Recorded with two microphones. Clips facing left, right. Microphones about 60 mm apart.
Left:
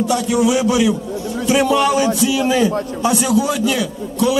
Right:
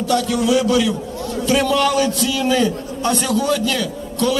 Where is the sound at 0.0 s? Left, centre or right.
Centre.